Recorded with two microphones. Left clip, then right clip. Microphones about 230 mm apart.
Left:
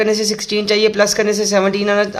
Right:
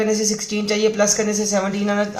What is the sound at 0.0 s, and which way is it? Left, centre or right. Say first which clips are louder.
Speech: left 4 dB; left.